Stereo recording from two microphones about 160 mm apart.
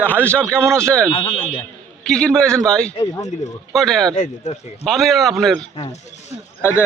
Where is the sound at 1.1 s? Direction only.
35° left (ahead or behind).